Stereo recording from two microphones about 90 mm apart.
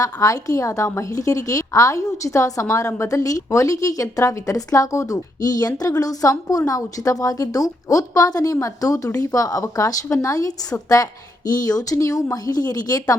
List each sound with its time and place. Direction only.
0.0 s a woman's voice: 40° left (ahead or behind)